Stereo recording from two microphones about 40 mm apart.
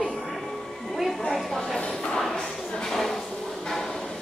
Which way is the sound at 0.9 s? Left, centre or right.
Centre.